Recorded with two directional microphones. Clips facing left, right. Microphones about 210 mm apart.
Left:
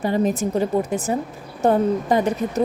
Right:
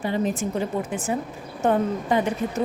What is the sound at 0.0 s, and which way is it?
A woman's voice, 40° left (ahead or behind).